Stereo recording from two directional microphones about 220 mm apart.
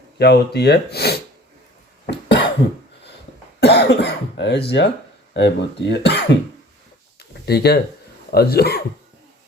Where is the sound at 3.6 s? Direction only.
50° left (ahead or behind).